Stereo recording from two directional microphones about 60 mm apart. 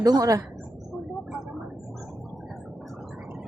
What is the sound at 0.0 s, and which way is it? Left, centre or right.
Speech, right.